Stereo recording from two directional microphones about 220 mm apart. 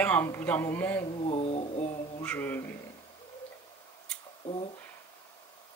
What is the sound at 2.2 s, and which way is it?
Speech, 10° left (ahead or behind).